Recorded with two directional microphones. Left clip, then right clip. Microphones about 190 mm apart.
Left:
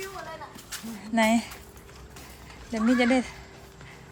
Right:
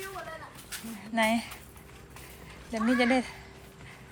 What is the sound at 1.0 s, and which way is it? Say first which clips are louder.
Speech: left 3 dB; 20° left (ahead or behind).